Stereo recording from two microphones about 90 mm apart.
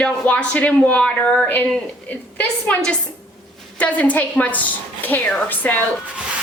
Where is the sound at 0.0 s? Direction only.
15° left (ahead or behind).